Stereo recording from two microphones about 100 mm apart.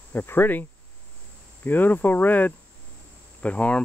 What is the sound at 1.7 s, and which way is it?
Speech, 20° left (ahead or behind).